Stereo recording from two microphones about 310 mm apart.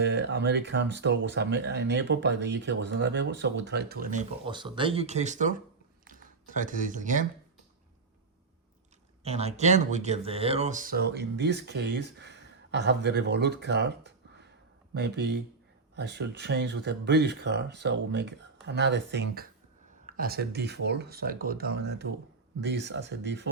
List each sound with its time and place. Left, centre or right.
0.0 s speech: right
9.2 s speech: centre